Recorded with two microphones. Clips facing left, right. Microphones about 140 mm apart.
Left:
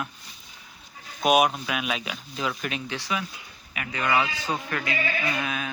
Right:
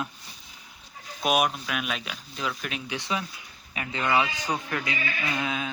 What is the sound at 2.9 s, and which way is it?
A man's voice, 25° right (ahead or behind).